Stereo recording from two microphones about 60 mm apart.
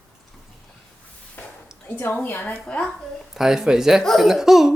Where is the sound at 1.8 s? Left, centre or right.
Left.